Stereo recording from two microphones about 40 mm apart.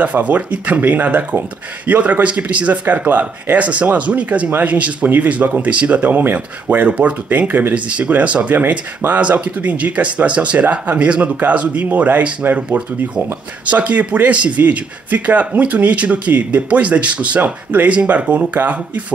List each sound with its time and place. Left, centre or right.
0.0 s speech: right
6.9 s speech: right
8.5 s speech: right
13.7 s speech: right